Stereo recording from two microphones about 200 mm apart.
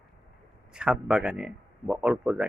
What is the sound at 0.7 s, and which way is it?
Speech, 5° right (ahead or behind).